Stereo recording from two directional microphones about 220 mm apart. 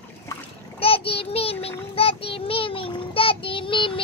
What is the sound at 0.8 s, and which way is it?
Child singing, 25° left (ahead or behind).